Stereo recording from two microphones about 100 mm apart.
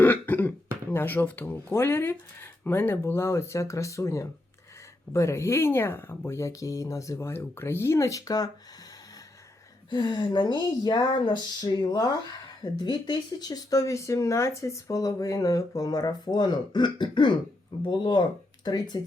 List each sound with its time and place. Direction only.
0.0 s speech: 20° left (ahead or behind); by 8.4 s 40° left (ahead or behind)
9.9 s speech: 45° left (ahead or behind)